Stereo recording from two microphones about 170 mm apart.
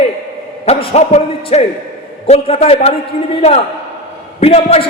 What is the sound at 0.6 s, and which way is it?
A man's voice, 40° left (ahead or behind).